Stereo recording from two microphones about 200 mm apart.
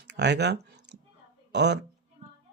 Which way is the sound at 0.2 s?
60° right (ahead or behind).